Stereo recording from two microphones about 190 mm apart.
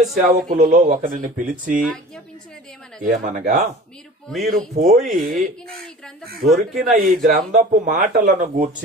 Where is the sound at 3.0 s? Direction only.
45° right (ahead or behind).